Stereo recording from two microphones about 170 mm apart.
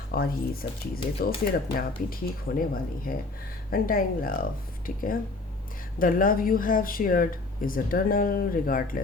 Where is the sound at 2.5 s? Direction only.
65° left (ahead or behind).